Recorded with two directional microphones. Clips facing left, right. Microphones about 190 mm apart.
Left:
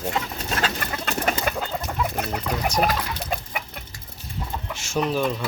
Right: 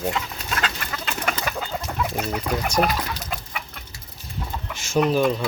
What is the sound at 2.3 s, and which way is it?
Speech, 5° left (ahead or behind).